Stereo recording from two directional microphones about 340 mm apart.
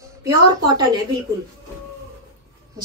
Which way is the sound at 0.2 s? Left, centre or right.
Centre.